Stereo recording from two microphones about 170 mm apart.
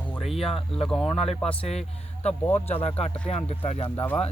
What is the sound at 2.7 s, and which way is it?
Speech, 35° left (ahead or behind).